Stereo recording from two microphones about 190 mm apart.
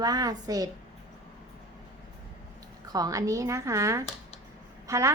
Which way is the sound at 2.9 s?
20° right (ahead or behind).